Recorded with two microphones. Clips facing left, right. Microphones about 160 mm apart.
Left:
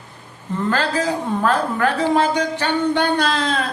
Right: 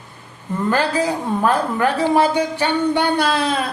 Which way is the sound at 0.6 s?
10° right (ahead or behind).